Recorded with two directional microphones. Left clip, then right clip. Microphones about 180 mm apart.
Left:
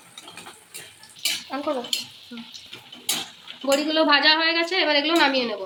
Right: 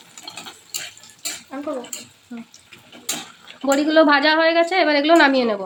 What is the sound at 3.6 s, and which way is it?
A woman's voice, 55° right (ahead or behind).